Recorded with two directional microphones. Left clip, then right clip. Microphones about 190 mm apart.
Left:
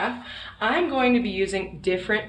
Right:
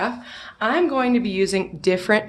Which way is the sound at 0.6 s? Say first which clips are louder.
Right 2 dB; 40° right (ahead or behind).